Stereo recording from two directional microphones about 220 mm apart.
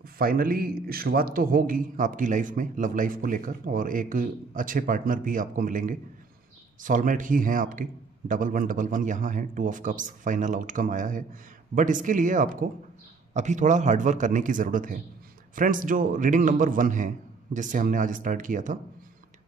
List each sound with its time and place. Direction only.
0.0 s a man's voice: 40° right (ahead or behind)